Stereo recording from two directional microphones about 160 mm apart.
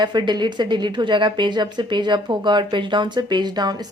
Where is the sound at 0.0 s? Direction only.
25° right (ahead or behind).